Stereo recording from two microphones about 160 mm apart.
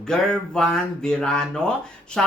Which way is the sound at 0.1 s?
5° left (ahead or behind).